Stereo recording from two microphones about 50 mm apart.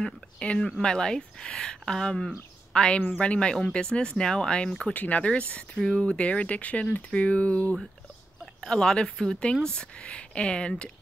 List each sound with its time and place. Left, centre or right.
0.0 s speech: centre
4.9 s speech: left
6.8 s speech: centre
8.5 s speech: centre